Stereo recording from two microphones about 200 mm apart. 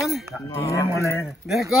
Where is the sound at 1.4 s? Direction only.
Centre (ahead or behind).